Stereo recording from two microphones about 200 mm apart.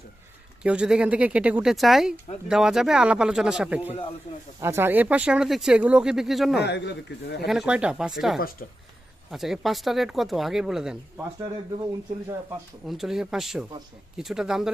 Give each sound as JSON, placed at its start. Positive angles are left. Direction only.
{"t": 0.6, "sound": "speech", "side_deg": -5}
{"t": 3.8, "sound": "speech", "side_deg": 30}
{"t": 4.6, "sound": "speech", "side_deg": -10}
{"t": 6.6, "sound": "speech", "side_deg": 60}
{"t": 7.4, "sound": "speech", "side_deg": 0}
{"t": 8.4, "sound": "speech", "side_deg": 45}
{"t": 9.3, "sound": "speech", "side_deg": 0}
{"t": 12.9, "sound": "speech", "side_deg": 0}